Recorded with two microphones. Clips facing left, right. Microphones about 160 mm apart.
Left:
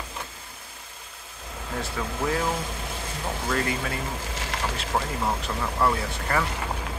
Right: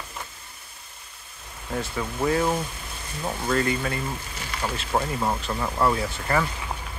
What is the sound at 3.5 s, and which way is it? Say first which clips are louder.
Speech: right 4 dB; centre (ahead or behind).